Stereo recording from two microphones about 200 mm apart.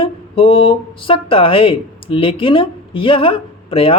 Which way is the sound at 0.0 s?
25° left (ahead or behind).